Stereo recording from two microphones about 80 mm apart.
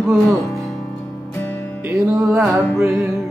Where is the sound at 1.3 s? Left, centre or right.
Left.